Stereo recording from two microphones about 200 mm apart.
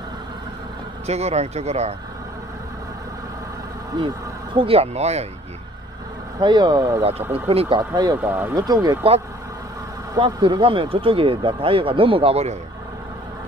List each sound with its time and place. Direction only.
1.0 s speech: 30° right (ahead or behind)
4.6 s speech: 30° right (ahead or behind)
6.4 s speech: 20° right (ahead or behind)
7.0 s speech: 30° right (ahead or behind)
10.1 s speech: 25° right (ahead or behind)